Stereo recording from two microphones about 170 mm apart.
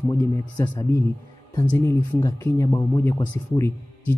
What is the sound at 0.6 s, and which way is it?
Speech, 15° left (ahead or behind).